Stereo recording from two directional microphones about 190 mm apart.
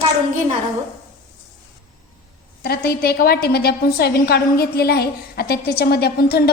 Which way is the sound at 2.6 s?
55° left (ahead or behind).